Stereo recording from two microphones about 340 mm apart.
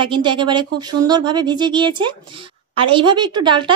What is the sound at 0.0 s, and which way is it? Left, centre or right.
A woman's voice, centre.